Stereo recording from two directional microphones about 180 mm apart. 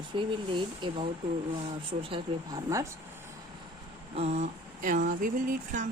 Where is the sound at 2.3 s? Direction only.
30° right (ahead or behind).